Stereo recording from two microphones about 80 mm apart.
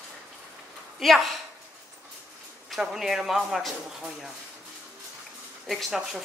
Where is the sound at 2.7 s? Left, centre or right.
Centre.